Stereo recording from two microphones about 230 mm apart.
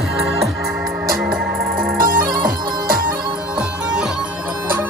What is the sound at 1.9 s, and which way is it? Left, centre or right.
Music, right.